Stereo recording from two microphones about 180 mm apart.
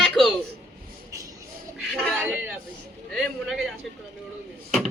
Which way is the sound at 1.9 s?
Centre (ahead or behind).